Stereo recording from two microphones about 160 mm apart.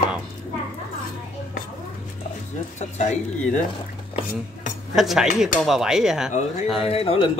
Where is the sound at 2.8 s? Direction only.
45° left (ahead or behind).